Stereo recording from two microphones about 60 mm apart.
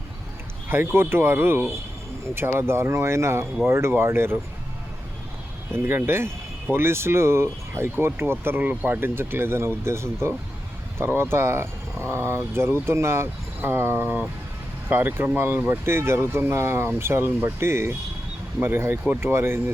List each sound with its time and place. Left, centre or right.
0.7 s speech: right
5.7 s speech: right
15.9 s speech: right